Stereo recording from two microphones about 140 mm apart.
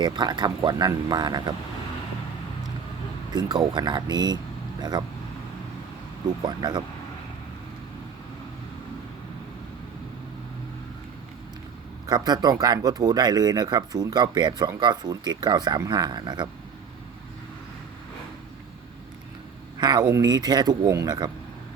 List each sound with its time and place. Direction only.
0.0 s speech: 30° right (ahead or behind)
3.8 s speech: 35° right (ahead or behind)
6.2 s speech: 30° right (ahead or behind)
12.0 s speech: 30° right (ahead or behind)
19.8 s speech: 30° right (ahead or behind)